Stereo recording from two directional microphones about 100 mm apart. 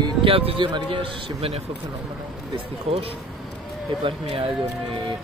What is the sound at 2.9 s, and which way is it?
Speech, 90° right.